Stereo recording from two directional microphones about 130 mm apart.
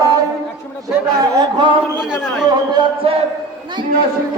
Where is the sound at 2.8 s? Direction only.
35° right (ahead or behind).